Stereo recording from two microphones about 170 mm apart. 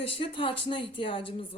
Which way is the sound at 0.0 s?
30° left (ahead or behind).